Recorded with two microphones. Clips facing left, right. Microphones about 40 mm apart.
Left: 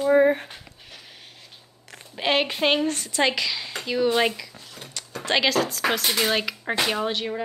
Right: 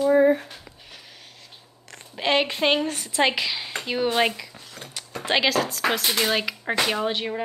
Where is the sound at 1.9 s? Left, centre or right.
Centre; by 4.1 s right.